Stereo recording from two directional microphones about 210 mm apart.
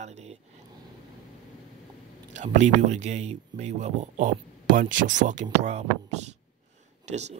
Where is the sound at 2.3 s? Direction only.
35° right (ahead or behind).